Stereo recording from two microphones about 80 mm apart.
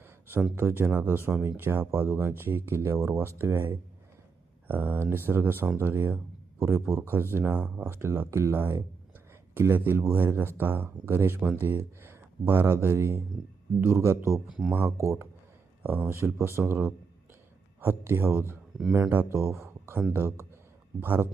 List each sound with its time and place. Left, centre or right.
0.0 s a sound: right
0.5 s a man's voice: right
14.6 s speech: centre
14.8 s speech: right
15.8 s speech: right
16.1 s speech: right